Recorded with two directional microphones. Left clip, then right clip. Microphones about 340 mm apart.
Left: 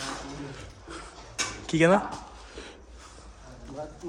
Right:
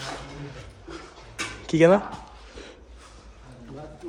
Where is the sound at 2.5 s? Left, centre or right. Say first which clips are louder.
Right 1 dB; centre.